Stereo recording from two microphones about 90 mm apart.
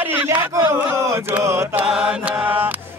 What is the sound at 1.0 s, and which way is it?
Chant, 35° right (ahead or behind).